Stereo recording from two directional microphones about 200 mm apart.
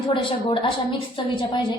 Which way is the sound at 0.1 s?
25° left (ahead or behind).